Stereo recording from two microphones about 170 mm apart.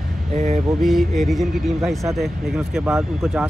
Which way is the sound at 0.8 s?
Centre (ahead or behind).